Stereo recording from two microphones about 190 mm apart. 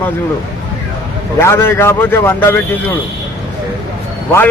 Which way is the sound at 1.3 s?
10° left (ahead or behind).